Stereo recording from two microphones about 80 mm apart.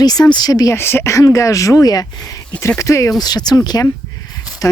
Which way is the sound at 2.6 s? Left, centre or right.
Left.